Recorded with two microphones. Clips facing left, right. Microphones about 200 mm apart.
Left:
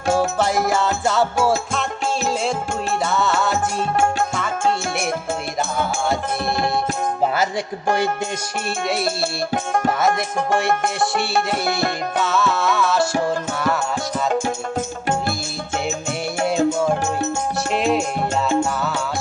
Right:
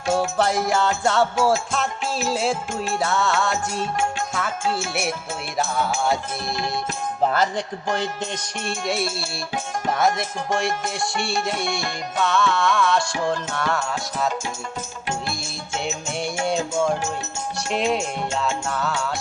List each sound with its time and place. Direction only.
0.1 s music: centre (ahead or behind)
3.9 s music: 55° left (ahead or behind)
10.7 s music: 60° left (ahead or behind)
12.2 s music: 5° left (ahead or behind)
17.7 s music: centre (ahead or behind)